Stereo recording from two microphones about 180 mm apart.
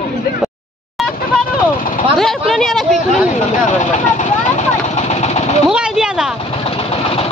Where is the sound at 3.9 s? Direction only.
45° left (ahead or behind).